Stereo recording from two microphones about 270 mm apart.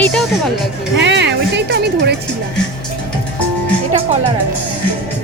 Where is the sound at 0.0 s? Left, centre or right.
Centre.